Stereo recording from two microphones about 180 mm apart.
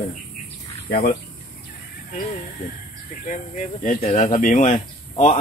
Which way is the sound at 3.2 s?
45° left (ahead or behind).